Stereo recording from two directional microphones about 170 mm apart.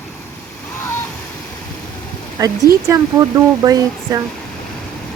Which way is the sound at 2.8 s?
20° right (ahead or behind).